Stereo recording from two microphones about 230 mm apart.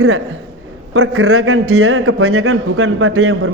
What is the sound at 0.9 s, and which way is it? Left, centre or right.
A man's voice, right.